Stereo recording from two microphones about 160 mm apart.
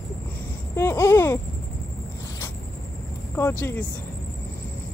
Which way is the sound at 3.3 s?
15° left (ahead or behind).